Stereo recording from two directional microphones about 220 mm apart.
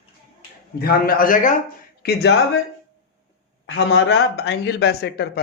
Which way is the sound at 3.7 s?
60° left (ahead or behind).